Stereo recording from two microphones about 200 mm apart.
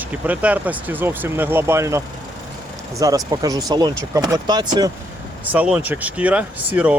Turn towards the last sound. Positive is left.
turn(degrees=-5)  # may be behind; listen again after turning